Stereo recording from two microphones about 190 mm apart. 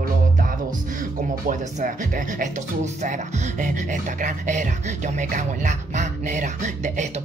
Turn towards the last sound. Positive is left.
turn(degrees=-40)  # may be behind; listen again after turning